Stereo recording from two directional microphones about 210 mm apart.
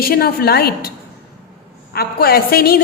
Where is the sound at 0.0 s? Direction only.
45° left (ahead or behind).